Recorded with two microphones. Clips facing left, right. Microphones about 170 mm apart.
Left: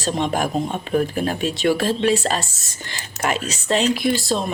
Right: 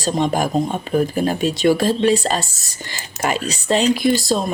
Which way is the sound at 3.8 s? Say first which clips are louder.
Right 3 dB; 40° right (ahead or behind).